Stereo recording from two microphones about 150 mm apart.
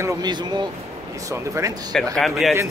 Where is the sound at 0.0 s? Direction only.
30° right (ahead or behind).